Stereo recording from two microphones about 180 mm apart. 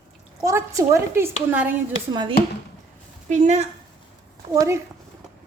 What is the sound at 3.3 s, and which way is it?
Speech, 40° right (ahead or behind).